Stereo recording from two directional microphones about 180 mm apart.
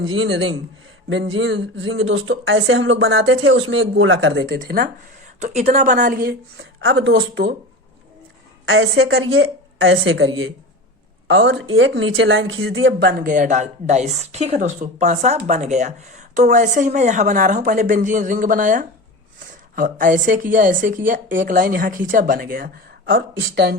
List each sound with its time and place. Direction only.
0.2 s speech: 90° right
4.6 s a woman's voice: 50° right (ahead or behind)
5.4 s speech: 40° right (ahead or behind)
5.9 s a woman's voice: 60° right (ahead or behind)
6.6 s speech: 90° right
8.7 s a woman's voice: 90° right
13.2 s a woman's voice: 45° right (ahead or behind)
23.1 s speech: 70° right (ahead or behind)